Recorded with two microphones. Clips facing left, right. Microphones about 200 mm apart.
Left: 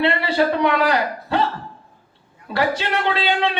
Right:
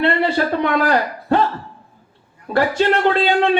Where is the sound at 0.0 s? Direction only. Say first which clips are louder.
Right 1 dB; 50° right (ahead or behind).